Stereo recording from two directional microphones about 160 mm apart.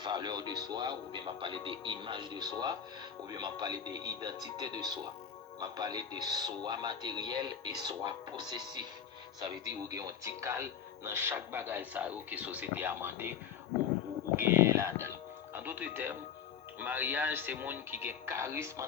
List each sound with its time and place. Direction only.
0.0 s speech: 25° right (ahead or behind)
14.3 s speech: 15° right (ahead or behind)